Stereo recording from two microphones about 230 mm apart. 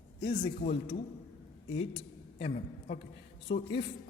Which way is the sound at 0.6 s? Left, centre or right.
Left.